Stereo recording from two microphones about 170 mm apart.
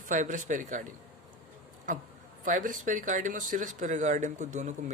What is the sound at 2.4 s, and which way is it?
Speech, 50° right (ahead or behind).